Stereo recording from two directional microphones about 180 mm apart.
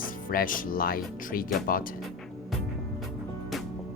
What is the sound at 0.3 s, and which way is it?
Speech, 50° left (ahead or behind).